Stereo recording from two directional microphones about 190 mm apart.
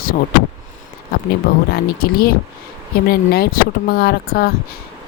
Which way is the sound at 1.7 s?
50° left (ahead or behind).